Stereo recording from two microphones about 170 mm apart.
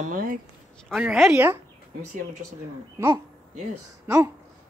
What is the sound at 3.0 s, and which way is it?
Speech, 15° right (ahead or behind).